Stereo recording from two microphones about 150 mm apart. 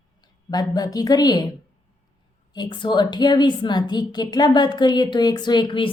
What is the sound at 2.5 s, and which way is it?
A woman's voice, 30° left (ahead or behind).